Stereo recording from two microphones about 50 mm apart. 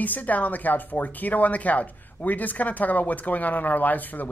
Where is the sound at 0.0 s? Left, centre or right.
Left.